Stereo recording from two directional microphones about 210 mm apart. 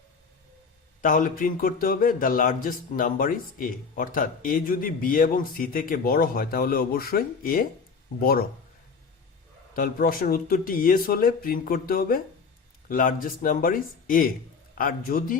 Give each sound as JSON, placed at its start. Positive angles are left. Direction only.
{"t": 1.0, "sound": "speech", "side_deg": 40}
{"t": 9.7, "sound": "speech", "side_deg": 40}